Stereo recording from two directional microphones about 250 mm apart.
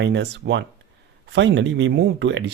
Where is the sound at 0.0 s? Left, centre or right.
Right.